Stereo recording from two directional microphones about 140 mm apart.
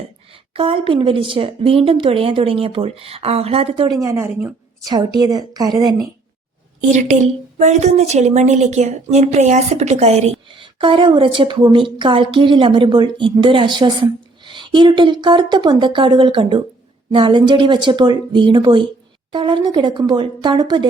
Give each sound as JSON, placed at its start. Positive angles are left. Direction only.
{"t": 0.5, "sound": "speech", "side_deg": -40}
{"t": 3.9, "sound": "a woman's voice", "side_deg": -20}
{"t": 4.9, "sound": "a woman's voice", "side_deg": -30}
{"t": 7.6, "sound": "a woman's voice", "side_deg": -55}
{"t": 10.5, "sound": "speech", "side_deg": -35}